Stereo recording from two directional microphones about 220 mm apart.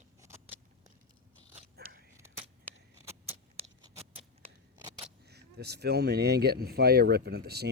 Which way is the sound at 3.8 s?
25° right (ahead or behind).